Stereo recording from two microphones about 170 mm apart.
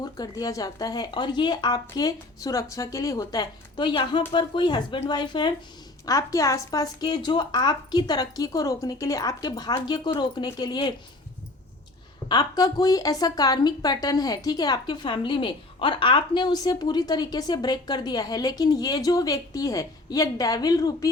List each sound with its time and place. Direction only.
0.0 s a woman's voice: 20° left (ahead or behind)
12.3 s a woman's voice: 25° left (ahead or behind)